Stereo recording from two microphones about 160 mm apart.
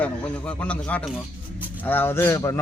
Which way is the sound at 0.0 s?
10° left (ahead or behind).